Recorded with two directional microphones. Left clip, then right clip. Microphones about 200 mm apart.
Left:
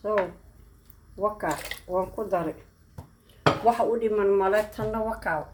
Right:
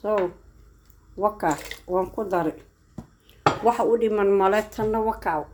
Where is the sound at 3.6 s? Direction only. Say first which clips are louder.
Right 4 dB; 45° right (ahead or behind).